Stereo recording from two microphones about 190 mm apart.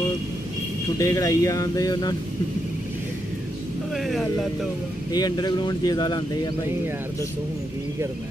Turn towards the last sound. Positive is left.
turn(degrees=20)  # may be behind; listen again after turning